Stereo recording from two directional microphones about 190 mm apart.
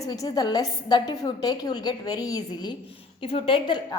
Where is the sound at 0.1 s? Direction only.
20° left (ahead or behind).